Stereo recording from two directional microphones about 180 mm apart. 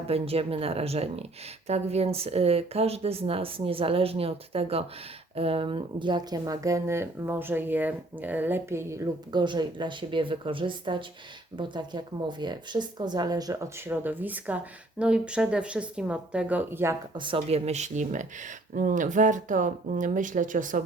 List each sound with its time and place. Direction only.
0.1 s speech: 35° right (ahead or behind); by 17.0 s 15° right (ahead or behind)
17.2 s speech: 30° right (ahead or behind); by 20.8 s 45° right (ahead or behind)